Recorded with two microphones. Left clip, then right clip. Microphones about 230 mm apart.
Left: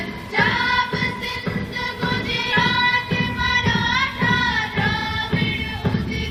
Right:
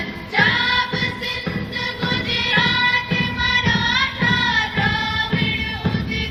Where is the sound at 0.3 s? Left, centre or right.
Right.